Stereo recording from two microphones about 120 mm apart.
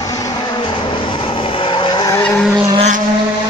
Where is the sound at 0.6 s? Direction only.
45° left (ahead or behind).